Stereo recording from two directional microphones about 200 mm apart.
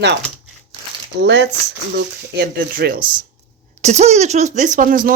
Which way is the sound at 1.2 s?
60° right (ahead or behind).